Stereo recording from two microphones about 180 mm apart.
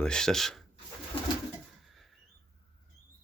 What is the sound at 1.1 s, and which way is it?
Pigeon, 30° left (ahead or behind).